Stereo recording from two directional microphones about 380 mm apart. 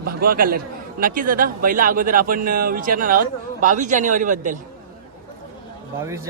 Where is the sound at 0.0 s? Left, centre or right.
Right.